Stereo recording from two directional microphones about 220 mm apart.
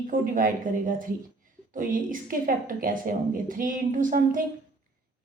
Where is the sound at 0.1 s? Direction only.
40° right (ahead or behind).